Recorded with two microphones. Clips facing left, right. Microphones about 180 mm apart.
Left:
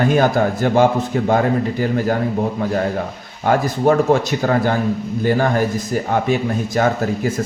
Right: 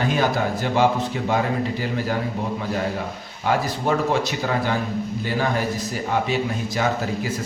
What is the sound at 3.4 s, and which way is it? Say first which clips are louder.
A man's voice: left 6 dB; 50° left (ahead or behind).